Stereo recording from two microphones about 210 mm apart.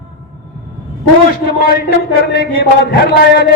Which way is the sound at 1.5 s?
45° left (ahead or behind).